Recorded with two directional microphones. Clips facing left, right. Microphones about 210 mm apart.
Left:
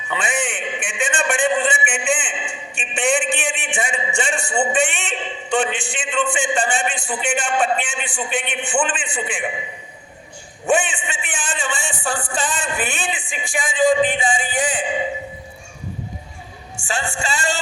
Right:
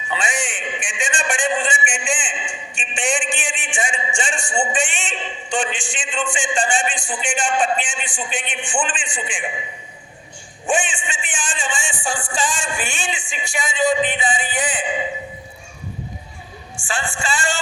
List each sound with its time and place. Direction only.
0.1 s a sound: 55° left (ahead or behind)
4.7 s a man's voice: 60° left (ahead or behind)
10.7 s a man's voice: 60° left (ahead or behind)
14.0 s music: 45° left (ahead or behind)
16.8 s speech: 40° left (ahead or behind)